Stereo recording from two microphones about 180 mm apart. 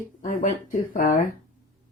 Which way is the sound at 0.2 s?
45° left (ahead or behind).